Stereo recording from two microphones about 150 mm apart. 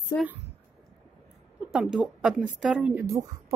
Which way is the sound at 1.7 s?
5° right (ahead or behind).